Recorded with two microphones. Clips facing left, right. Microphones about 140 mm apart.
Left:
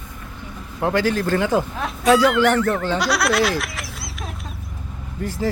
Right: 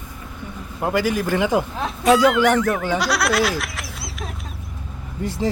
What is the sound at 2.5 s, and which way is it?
Speech, 10° right (ahead or behind).